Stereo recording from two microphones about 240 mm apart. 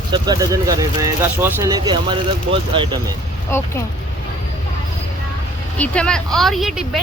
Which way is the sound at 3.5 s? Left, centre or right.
Centre.